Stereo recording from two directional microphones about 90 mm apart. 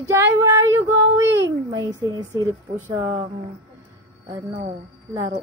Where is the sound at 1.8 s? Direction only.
45° right (ahead or behind).